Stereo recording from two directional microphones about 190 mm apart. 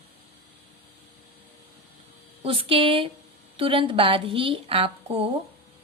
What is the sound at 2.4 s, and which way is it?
A woman's voice, 30° right (ahead or behind).